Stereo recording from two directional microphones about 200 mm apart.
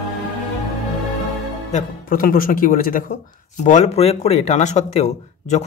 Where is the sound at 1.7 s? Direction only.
40° left (ahead or behind).